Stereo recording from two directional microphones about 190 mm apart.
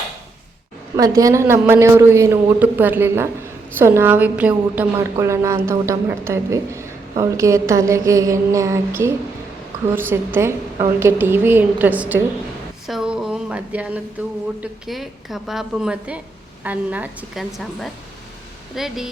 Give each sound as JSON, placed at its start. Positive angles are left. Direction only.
{"t": 0.9, "sound": "a woman's voice", "side_deg": -20}